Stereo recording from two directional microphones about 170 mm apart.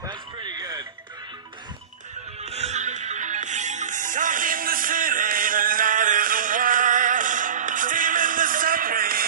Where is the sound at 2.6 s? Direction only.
40° right (ahead or behind).